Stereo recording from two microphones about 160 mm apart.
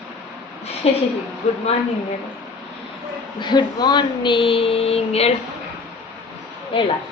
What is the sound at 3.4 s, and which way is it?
Speech, 30° left (ahead or behind).